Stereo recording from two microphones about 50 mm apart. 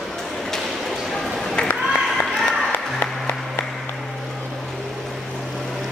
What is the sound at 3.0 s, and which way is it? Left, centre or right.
Applause, left.